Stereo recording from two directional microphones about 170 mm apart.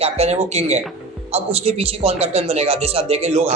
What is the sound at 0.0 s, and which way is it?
A man's voice, 40° right (ahead or behind).